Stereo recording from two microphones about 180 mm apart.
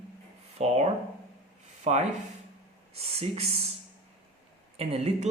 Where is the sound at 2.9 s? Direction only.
35° right (ahead or behind).